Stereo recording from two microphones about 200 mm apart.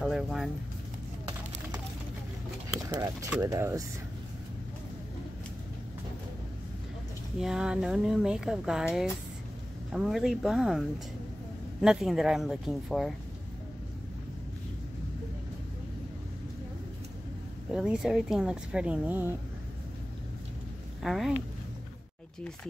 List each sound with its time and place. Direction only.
0.0 s vehicle: centre (ahead or behind)
2.9 s speech: 15° right (ahead or behind)
7.3 s speech: 5° right (ahead or behind)
17.7 s speech: 5° right (ahead or behind)
21.0 s speech: centre (ahead or behind)